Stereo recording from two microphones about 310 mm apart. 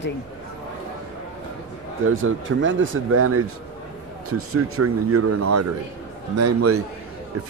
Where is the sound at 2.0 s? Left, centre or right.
Right.